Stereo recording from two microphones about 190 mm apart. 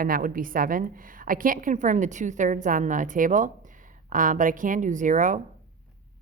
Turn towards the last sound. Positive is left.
turn(degrees=-40)  # may be behind; listen again after turning